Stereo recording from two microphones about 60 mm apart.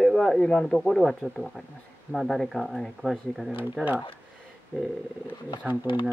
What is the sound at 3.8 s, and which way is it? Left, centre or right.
Speech, centre.